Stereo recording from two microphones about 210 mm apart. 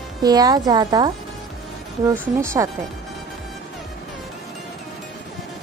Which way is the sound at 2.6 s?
10° right (ahead or behind).